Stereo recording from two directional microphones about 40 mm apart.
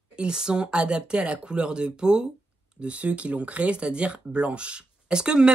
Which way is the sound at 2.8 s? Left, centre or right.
Right.